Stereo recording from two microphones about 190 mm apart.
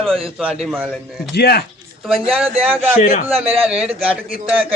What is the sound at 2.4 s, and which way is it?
A man's voice, 5° right (ahead or behind).